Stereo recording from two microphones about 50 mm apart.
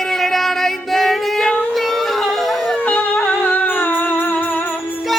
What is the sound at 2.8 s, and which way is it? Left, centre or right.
Music, left.